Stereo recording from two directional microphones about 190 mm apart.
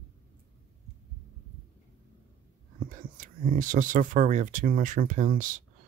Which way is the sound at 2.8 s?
45° right (ahead or behind).